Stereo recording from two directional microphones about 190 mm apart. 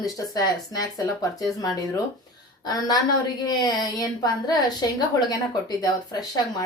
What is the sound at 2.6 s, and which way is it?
A woman's voice, 20° left (ahead or behind).